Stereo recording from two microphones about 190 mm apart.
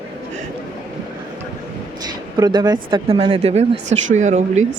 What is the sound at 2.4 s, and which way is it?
Speech, 20° right (ahead or behind).